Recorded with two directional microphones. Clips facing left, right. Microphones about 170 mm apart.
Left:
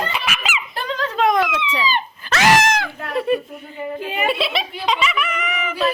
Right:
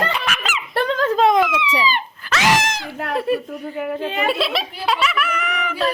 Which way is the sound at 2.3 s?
50° left (ahead or behind).